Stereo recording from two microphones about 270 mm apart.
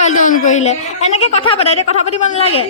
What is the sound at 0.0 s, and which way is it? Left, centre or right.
A woman's voice, left.